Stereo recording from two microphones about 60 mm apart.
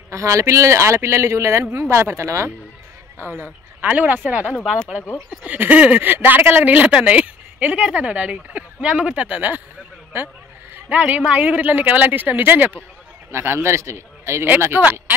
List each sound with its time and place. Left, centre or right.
0.1 s speech: right
3.2 s speech: right
10.1 s a sound: right
11.0 s speech: right
13.3 s a man's voice: right
14.6 s speech: right